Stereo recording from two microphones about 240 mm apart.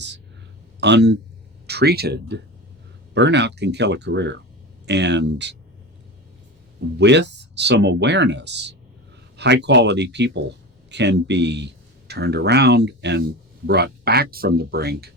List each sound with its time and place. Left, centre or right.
0.8 s speech: right
7.0 s speech: right